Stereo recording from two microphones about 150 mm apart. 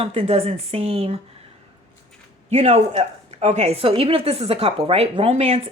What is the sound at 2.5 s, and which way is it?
A woman's voice, 45° right (ahead or behind).